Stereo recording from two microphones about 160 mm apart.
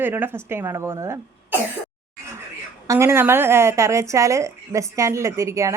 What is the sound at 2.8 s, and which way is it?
A woman's voice, 20° right (ahead or behind).